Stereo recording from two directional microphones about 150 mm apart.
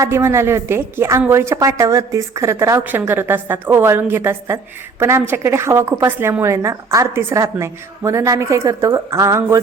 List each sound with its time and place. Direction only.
0.0 s a woman's voice: 20° right (ahead or behind)